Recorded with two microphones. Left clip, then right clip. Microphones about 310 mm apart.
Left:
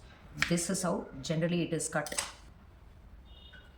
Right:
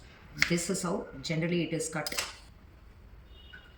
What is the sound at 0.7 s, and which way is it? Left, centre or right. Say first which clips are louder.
Speech: even; centre.